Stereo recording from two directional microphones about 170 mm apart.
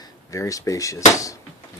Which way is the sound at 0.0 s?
20° left (ahead or behind).